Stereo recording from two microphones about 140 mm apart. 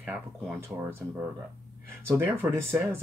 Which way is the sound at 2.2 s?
20° right (ahead or behind).